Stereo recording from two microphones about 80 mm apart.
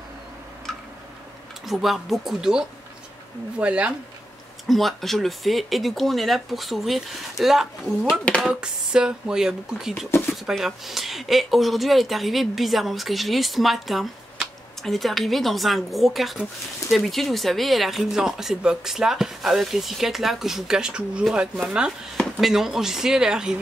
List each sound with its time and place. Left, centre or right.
0.7 s a sound: centre
1.7 s speech: centre
4.6 s speech: centre